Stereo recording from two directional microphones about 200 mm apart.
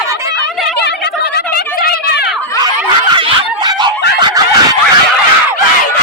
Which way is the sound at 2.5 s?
20° right (ahead or behind).